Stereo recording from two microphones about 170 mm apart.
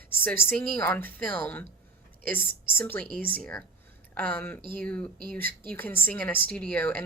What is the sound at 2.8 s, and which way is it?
Speech, 10° left (ahead or behind).